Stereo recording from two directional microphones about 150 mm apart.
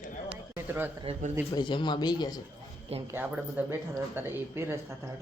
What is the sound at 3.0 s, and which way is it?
Speech, 15° right (ahead or behind).